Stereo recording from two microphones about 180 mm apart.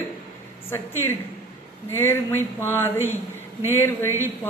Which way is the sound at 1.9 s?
15° left (ahead or behind).